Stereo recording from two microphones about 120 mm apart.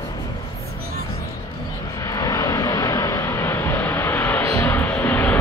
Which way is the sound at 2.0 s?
25° left (ahead or behind).